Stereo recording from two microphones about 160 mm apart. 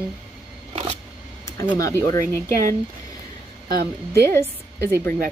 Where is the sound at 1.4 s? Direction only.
20° left (ahead or behind).